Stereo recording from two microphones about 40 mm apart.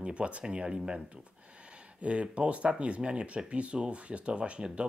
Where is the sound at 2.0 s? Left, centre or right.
Right.